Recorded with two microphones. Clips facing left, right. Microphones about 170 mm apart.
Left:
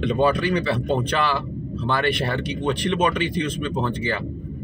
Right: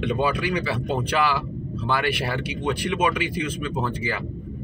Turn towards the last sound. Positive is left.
turn(degrees=-10)  # may be behind; listen again after turning